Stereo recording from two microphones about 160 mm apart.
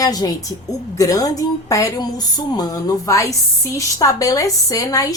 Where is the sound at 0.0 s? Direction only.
25° left (ahead or behind).